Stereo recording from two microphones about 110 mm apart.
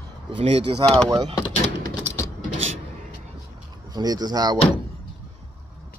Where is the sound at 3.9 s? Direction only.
40° right (ahead or behind).